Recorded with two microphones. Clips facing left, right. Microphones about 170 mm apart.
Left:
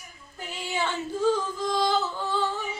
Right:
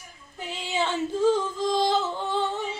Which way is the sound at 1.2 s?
20° right (ahead or behind).